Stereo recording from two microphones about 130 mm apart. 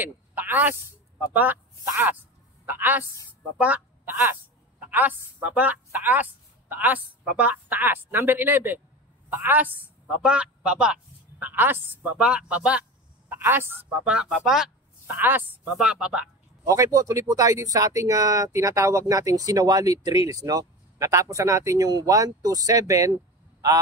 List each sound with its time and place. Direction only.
0.0 s a woman's voice: 15° right (ahead or behind)
2.6 s a woman's voice: 15° right (ahead or behind)
15.0 s a woman's voice: 15° right (ahead or behind)
16.6 s speech: 25° right (ahead or behind)